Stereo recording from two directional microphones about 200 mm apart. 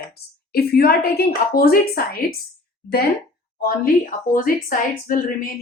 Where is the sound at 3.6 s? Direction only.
45° left (ahead or behind).